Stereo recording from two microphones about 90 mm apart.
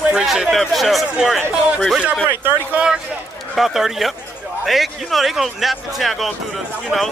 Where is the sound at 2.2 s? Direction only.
20° right (ahead or behind).